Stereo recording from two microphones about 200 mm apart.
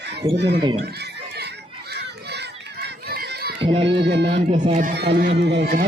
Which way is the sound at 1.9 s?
55° right (ahead or behind).